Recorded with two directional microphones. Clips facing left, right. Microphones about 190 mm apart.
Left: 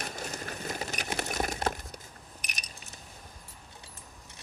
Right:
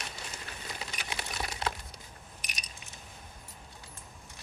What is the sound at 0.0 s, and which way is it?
Crumpling, 45° left (ahead or behind).